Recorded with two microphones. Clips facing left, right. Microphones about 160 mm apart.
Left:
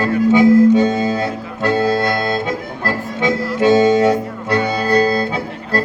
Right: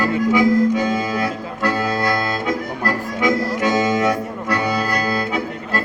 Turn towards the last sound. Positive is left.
turn(degrees=30)  # may be behind; listen again after turning